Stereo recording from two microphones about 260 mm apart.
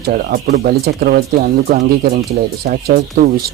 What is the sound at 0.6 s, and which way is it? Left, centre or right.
Speech, right.